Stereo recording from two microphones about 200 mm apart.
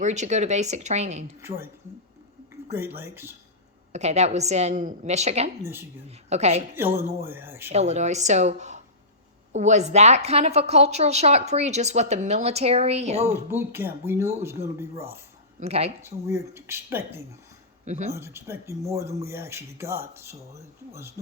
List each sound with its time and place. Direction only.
0.0 s a woman's voice: 35° right (ahead or behind)
2.6 s speech: 10° right (ahead or behind)
3.9 s a woman's voice: 35° right (ahead or behind)
6.7 s speech: 10° right (ahead or behind)
7.7 s a woman's voice: 35° right (ahead or behind)
13.2 s speech: 10° right (ahead or behind)
15.6 s a woman's voice: 30° right (ahead or behind)
16.0 s speech: 15° right (ahead or behind)
17.8 s a woman's voice: 35° right (ahead or behind)
18.1 s speech: 15° right (ahead or behind)